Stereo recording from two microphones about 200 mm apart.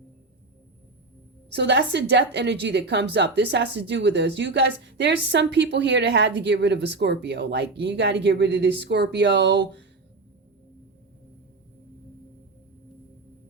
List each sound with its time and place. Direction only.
1.5 s a woman's voice: 60° right (ahead or behind)